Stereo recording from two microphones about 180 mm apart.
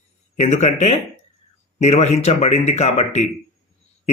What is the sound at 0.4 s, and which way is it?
Speech, 40° left (ahead or behind).